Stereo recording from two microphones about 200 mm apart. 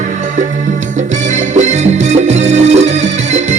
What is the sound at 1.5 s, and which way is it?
Music, 35° right (ahead or behind).